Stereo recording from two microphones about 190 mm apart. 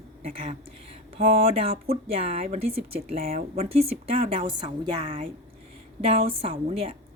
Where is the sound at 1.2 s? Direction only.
30° right (ahead or behind).